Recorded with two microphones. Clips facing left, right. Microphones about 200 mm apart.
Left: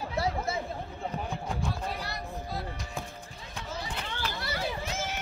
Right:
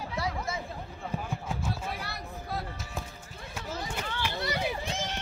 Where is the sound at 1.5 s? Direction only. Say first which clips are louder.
Even; 5° right (ahead or behind).